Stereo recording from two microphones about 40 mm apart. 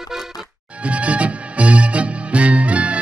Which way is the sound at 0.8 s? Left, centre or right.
Right.